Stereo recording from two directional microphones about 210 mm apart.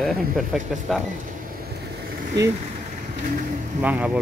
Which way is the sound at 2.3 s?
55° right (ahead or behind).